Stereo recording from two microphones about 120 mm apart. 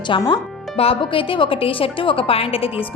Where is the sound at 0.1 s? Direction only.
45° left (ahead or behind).